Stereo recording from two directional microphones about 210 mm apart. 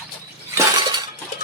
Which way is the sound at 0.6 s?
20° right (ahead or behind).